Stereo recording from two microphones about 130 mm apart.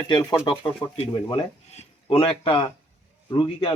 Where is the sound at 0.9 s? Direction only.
50° left (ahead or behind).